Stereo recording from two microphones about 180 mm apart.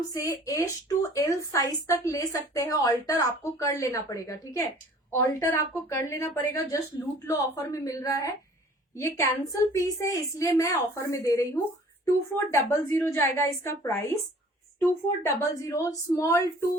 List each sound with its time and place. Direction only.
0.1 s a woman's voice: 15° left (ahead or behind)